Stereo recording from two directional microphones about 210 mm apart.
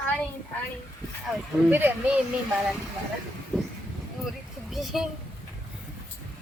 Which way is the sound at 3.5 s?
Centre (ahead or behind).